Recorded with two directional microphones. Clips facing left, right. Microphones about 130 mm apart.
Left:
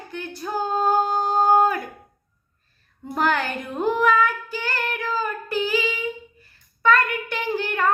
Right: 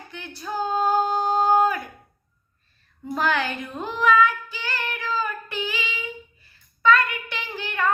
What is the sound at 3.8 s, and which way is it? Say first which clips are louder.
Child singing: even; 45° left (ahead or behind).